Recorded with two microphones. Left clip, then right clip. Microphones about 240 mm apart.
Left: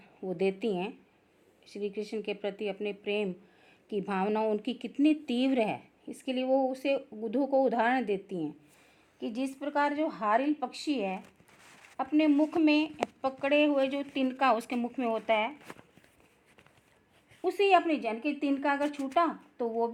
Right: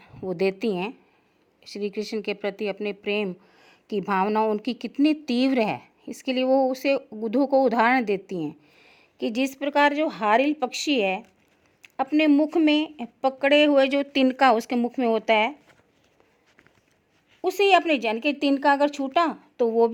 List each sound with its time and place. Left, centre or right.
0.0 s a woman's voice: right
17.4 s speech: right